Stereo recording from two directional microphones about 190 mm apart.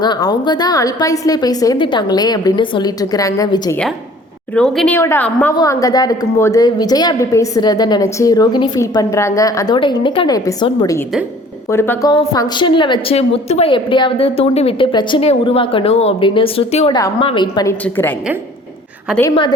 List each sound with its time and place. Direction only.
0.0 s a woman's voice: 20° left (ahead or behind)
4.5 s a woman's voice: centre (ahead or behind)
4.9 s a woman's voice: 10° left (ahead or behind)
17.8 s a woman's voice: 10° left (ahead or behind)